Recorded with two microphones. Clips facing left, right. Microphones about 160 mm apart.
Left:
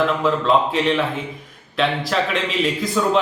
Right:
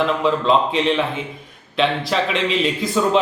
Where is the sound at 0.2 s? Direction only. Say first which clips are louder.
Right 1 dB; centre (ahead or behind).